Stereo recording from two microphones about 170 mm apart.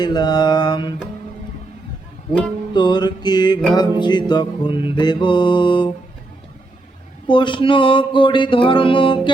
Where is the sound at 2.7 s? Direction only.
25° left (ahead or behind).